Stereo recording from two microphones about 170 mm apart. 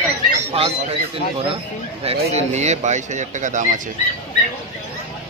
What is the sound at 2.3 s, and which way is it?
Speech, 40° right (ahead or behind).